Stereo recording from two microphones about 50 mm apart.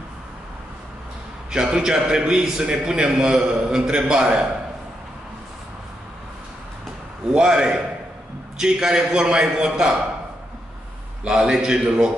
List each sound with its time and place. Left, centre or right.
1.5 s a man's voice: centre
7.3 s a man's voice: centre
11.2 s a man's voice: centre